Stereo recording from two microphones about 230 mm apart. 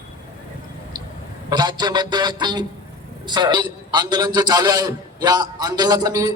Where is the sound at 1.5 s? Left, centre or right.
Centre.